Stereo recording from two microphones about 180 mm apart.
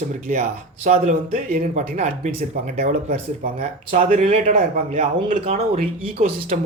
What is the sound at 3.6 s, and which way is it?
Speech, 35° right (ahead or behind).